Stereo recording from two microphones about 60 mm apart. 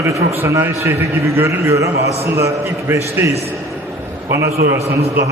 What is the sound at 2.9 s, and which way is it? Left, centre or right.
Speech, right.